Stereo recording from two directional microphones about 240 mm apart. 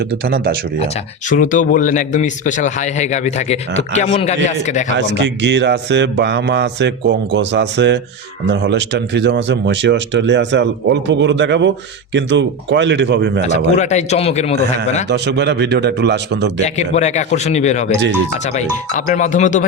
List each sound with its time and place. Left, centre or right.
0.3 s speech: right
1.3 s a man's voice: left
4.9 s speech: right
13.5 s a man's voice: left
15.1 s speech: right
16.6 s a man's voice: left